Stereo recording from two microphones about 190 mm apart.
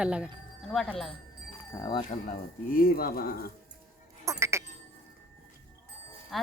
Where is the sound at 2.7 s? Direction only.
50° left (ahead or behind).